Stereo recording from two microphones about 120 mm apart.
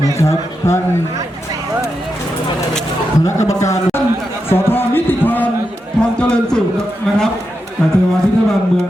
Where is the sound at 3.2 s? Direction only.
25° left (ahead or behind).